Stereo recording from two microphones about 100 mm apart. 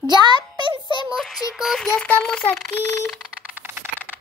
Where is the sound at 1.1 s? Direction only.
Centre (ahead or behind).